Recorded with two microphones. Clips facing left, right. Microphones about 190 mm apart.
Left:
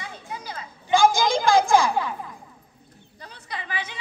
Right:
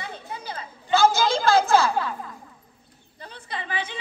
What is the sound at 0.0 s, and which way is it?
Children playing, 30° right (ahead or behind).